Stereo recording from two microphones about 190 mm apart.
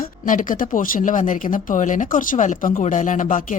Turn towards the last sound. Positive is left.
turn(degrees=45)  # may be behind; listen again after turning